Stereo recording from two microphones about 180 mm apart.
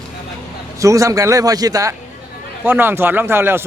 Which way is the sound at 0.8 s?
20° right (ahead or behind).